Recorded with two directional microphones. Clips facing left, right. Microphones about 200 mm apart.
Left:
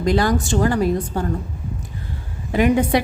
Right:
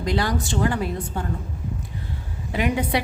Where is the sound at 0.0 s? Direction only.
45° left (ahead or behind).